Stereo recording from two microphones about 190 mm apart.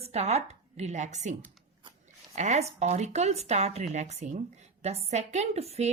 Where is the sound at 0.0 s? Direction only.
35° right (ahead or behind).